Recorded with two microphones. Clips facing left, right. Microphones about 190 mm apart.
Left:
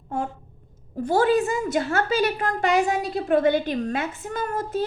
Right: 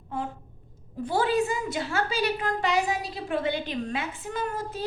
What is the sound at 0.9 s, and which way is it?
A woman's voice, 45° left (ahead or behind).